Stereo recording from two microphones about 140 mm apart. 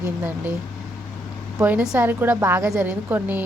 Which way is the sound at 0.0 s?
15° right (ahead or behind).